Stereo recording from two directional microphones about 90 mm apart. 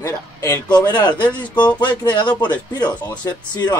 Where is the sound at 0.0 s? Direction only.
35° left (ahead or behind).